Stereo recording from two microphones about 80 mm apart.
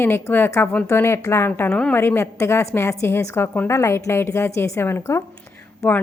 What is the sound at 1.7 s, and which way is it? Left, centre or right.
Speech, centre.